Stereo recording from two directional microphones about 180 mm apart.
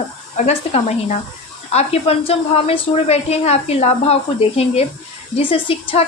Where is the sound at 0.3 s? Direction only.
35° left (ahead or behind).